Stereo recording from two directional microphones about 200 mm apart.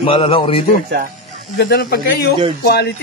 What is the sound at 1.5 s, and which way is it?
A man's voice, 55° left (ahead or behind).